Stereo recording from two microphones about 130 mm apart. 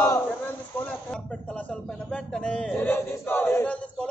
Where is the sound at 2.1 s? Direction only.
5° left (ahead or behind).